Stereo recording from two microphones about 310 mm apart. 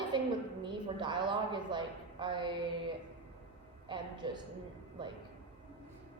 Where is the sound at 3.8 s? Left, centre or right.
Centre.